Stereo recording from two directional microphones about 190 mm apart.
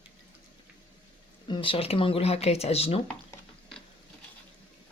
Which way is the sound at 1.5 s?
25° left (ahead or behind).